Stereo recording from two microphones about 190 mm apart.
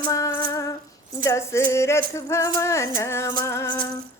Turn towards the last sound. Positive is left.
turn(degrees=15)  # may be behind; listen again after turning